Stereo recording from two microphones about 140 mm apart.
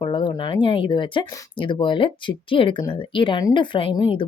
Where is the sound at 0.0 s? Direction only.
35° left (ahead or behind).